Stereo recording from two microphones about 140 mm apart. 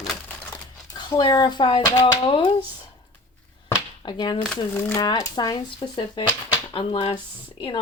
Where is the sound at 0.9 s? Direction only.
30° left (ahead or behind).